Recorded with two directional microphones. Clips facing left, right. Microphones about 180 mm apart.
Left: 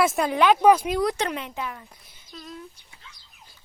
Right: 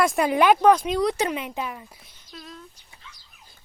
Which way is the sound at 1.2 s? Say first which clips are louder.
Right 2 dB; 10° right (ahead or behind).